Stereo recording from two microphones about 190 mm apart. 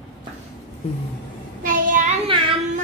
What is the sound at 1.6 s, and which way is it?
Child singing, 45° right (ahead or behind).